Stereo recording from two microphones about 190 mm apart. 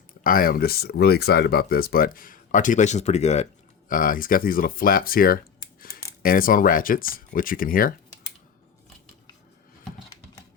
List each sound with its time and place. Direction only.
0.2 s speech: 50° left (ahead or behind)
3.8 s speech: 45° left (ahead or behind)